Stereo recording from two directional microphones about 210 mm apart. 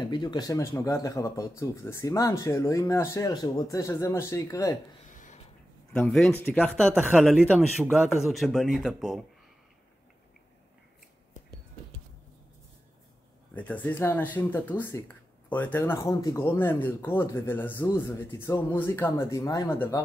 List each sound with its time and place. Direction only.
0.0 s speech: 20° left (ahead or behind)
5.1 s a sound: 35° left (ahead or behind)
5.9 s speech: centre (ahead or behind)
6.9 s speech: 5° right (ahead or behind)
13.6 s speech: 5° left (ahead or behind)